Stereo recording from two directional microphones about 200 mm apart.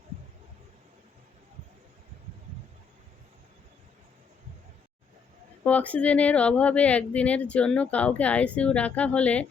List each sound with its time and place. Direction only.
5.6 s speech: 5° left (ahead or behind)